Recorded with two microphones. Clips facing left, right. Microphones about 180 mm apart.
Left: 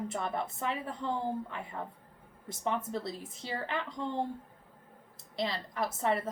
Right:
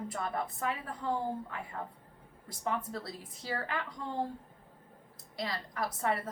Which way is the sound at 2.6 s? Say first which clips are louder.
Left 2 dB; 20° left (ahead or behind).